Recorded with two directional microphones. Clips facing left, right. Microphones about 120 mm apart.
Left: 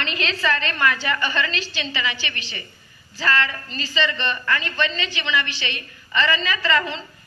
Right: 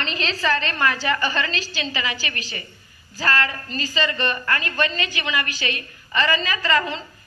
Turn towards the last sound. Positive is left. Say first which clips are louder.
# even
turn(degrees=-40)  # may be behind; listen again after turning